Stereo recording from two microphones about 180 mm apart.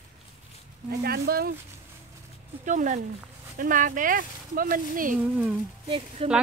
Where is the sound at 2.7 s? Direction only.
45° right (ahead or behind).